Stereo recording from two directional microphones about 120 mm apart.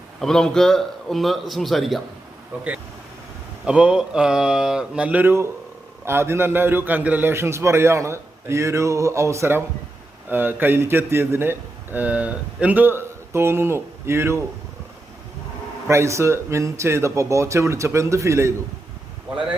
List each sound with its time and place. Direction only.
0.2 s a man's voice: 5° left (ahead or behind)
3.7 s a man's voice: 10° right (ahead or behind)
15.9 s a man's voice: 25° right (ahead or behind)